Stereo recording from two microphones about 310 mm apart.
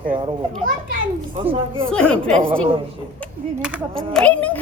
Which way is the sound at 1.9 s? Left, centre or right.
Centre.